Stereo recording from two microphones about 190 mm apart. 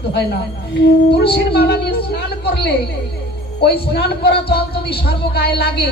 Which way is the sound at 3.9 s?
55° left (ahead or behind).